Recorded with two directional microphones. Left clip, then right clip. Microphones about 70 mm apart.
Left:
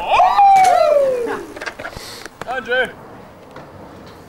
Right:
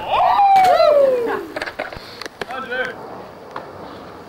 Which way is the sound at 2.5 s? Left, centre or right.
Left.